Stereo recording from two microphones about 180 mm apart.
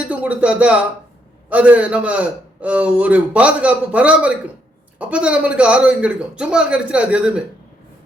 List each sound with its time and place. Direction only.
0.1 s a man's voice: 10° right (ahead or behind)